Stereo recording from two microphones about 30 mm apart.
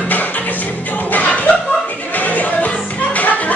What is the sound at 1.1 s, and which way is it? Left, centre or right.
Music, left.